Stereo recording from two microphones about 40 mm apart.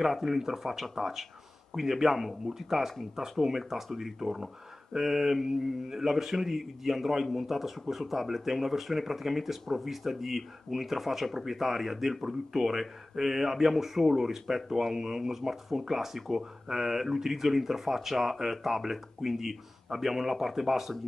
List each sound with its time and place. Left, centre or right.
0.0 s speech: centre